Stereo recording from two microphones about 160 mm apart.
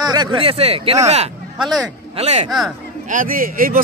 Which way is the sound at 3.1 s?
60° right (ahead or behind).